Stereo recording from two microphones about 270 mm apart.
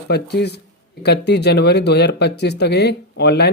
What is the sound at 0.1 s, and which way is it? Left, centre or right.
Speech, left.